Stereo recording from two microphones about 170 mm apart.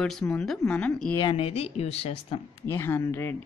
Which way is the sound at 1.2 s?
30° left (ahead or behind).